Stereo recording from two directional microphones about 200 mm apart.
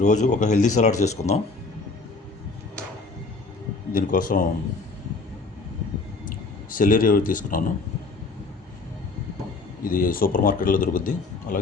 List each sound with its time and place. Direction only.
0.0 s speech: 35° left (ahead or behind)
3.9 s speech: 45° left (ahead or behind)
6.2 s speech: 45° left (ahead or behind)
9.8 s speech: 45° left (ahead or behind)